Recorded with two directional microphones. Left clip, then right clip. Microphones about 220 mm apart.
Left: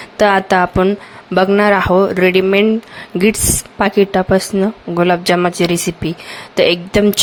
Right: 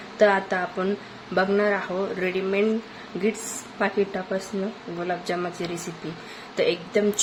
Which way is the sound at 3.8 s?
45° left (ahead or behind).